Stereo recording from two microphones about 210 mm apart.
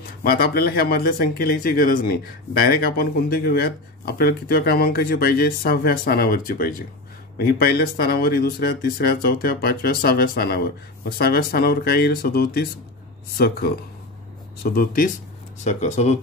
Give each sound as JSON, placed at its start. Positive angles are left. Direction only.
{"t": 0.2, "sound": "speech", "side_deg": 45}